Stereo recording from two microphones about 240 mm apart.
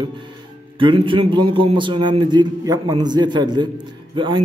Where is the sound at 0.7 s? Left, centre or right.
Right.